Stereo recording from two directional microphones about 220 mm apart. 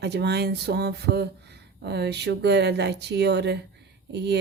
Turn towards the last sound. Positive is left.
turn(degrees=-50)  # may be behind; listen again after turning